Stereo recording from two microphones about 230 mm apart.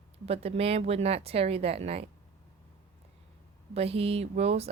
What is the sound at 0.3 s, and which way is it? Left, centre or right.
Speech, right.